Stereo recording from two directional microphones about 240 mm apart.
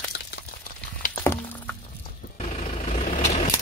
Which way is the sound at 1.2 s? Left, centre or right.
Centre.